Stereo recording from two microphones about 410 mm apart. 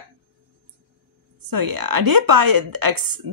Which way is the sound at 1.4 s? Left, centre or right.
Right.